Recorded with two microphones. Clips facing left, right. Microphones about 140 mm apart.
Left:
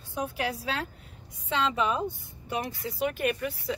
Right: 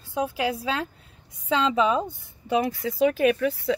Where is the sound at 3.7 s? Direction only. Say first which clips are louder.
Right 7 dB; 90° right.